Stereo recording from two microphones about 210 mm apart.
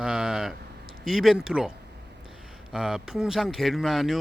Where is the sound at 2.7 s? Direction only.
5° right (ahead or behind).